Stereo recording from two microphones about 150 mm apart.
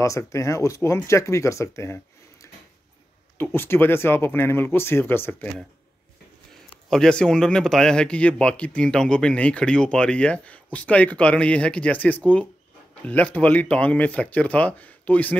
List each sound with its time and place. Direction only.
0.0 s speech: 20° left (ahead or behind)
3.3 s speech: 15° left (ahead or behind)
6.9 s speech: 5° left (ahead or behind)